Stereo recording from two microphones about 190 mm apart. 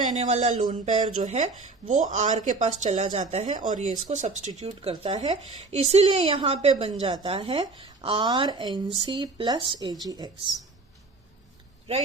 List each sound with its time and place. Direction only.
0.2 s a woman's voice: 35° right (ahead or behind)